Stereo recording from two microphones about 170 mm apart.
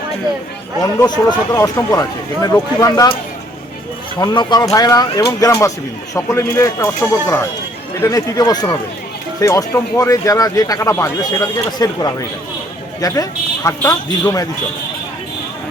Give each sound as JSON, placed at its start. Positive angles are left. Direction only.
{"t": 0.8, "sound": "speech", "side_deg": 25}
{"t": 4.2, "sound": "speech", "side_deg": 25}